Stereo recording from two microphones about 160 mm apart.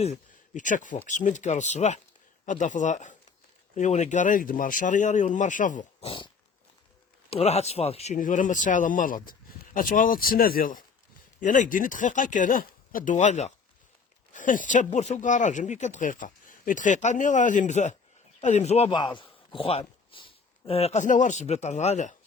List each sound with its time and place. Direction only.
0.0 s speech: 50° left (ahead or behind)
6.1 s dog: 30° left (ahead or behind)
7.3 s a man's voice: 40° left (ahead or behind)